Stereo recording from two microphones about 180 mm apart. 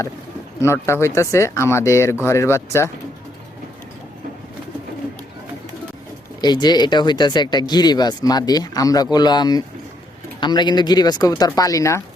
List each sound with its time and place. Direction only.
0.6 s speech: 15° left (ahead or behind)
6.4 s speech: 25° left (ahead or behind)